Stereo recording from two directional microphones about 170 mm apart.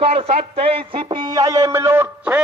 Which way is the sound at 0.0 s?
35° right (ahead or behind).